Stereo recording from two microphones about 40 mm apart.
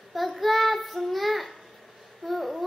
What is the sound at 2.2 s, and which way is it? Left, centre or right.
Babbling, centre.